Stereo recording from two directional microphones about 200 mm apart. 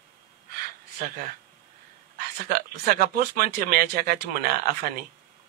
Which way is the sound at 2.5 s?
50° right (ahead or behind).